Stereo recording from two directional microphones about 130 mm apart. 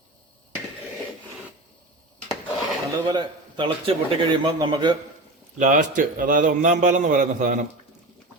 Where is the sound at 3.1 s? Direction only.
35° right (ahead or behind).